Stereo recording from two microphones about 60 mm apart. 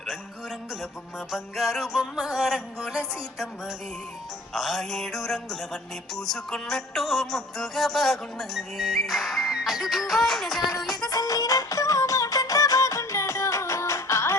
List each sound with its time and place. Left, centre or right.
1.8 s music: centre
4.5 s music: centre
11.1 s music: left